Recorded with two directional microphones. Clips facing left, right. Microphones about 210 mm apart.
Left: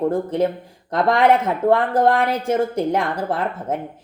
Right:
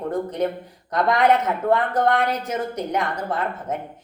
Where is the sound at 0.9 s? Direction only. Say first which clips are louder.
Left 2 dB; 30° left (ahead or behind).